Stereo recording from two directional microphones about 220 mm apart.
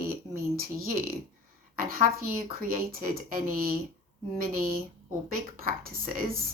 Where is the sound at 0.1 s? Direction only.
40° right (ahead or behind).